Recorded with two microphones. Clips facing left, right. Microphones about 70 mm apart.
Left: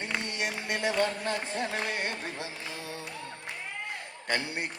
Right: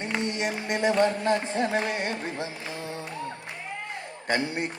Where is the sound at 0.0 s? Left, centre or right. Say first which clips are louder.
Right 5 dB; right.